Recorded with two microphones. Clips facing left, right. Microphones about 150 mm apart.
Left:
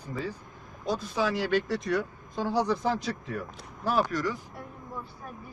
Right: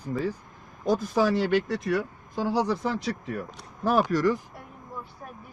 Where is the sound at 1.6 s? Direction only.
5° right (ahead or behind).